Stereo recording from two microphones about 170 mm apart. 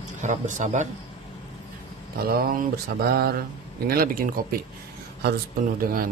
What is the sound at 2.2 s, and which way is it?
Mantra, 60° right (ahead or behind).